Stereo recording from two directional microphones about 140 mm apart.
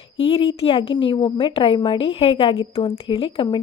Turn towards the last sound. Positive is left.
turn(degrees=35)  # may be behind; listen again after turning